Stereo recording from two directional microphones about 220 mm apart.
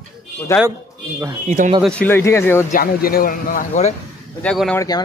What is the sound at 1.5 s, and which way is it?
Speech, 30° right (ahead or behind).